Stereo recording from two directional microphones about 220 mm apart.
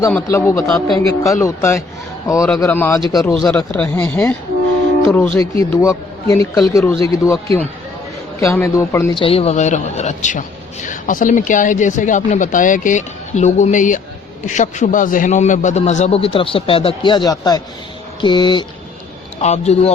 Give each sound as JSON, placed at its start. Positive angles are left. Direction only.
{"t": 0.0, "sound": "speech", "side_deg": 10}
{"t": 9.1, "sound": "a man's voice", "side_deg": 25}